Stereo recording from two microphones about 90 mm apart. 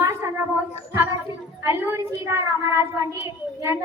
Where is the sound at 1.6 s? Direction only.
30° right (ahead or behind).